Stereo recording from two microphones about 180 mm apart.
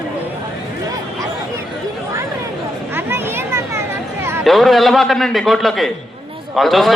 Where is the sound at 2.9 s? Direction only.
10° right (ahead or behind).